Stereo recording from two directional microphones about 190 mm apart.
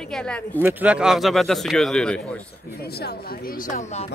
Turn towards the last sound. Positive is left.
turn(degrees=40)  # may be behind; listen again after turning